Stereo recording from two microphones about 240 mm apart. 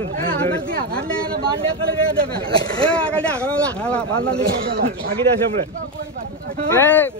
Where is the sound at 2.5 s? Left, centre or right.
Centre.